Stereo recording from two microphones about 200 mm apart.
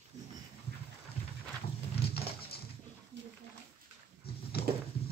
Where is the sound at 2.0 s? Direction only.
50° left (ahead or behind).